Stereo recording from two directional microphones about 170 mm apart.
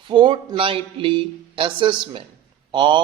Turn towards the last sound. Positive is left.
turn(degrees=-30)  # may be behind; listen again after turning